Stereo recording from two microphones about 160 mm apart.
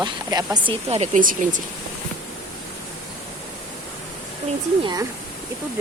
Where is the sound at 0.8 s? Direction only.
40° right (ahead or behind).